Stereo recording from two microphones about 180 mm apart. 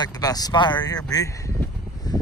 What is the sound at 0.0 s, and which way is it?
Speech, 20° left (ahead or behind).